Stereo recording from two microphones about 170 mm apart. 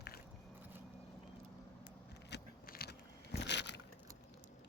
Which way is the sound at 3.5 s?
90° left.